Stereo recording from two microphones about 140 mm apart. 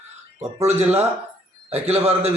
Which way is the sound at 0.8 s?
50° right (ahead or behind).